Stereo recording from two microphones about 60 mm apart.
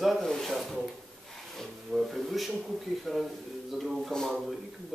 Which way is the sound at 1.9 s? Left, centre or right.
Centre.